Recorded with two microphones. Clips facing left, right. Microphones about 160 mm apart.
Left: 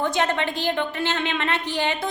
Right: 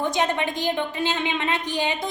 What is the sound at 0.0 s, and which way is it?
A woman's voice, 15° right (ahead or behind).